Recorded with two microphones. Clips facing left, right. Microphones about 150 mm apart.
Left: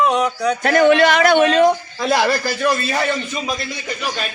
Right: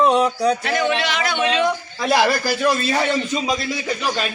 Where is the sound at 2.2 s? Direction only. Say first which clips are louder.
Even; 10° right (ahead or behind).